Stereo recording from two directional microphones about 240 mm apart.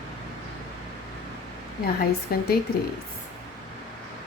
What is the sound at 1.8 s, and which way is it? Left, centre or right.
Speech, left.